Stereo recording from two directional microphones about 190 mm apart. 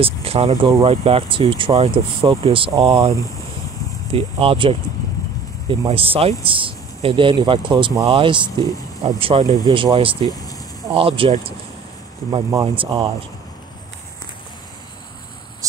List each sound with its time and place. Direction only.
0.0 s speech: 30° right (ahead or behind)
2.7 s speech: 15° right (ahead or behind)
4.1 s speech: 30° right (ahead or behind)
10.2 s speech: 20° left (ahead or behind)
10.9 s speech: 30° right (ahead or behind)
12.6 s speech: 30° right (ahead or behind)